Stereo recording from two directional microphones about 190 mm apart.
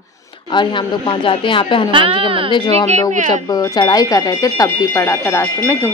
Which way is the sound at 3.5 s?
20° left (ahead or behind).